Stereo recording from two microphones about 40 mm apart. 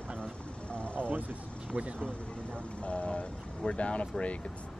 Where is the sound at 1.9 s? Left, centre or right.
Left.